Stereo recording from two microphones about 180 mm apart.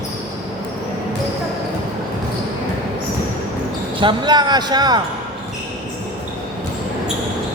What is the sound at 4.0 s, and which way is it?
Speech, 25° right (ahead or behind).